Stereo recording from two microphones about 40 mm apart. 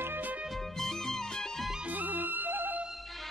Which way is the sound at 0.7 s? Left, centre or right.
Centre.